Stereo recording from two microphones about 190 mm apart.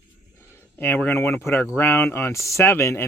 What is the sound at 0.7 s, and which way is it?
Speech, 10° left (ahead or behind).